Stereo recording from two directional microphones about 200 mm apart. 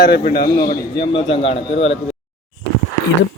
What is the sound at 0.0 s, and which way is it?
Speech, 50° left (ahead or behind).